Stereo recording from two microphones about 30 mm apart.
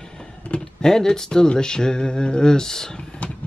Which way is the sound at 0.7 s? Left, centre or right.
Left.